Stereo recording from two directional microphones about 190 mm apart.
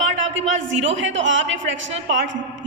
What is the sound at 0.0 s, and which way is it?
A man's voice, 85° right.